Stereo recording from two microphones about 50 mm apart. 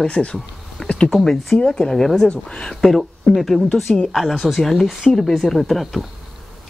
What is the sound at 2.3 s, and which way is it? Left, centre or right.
Speech, centre.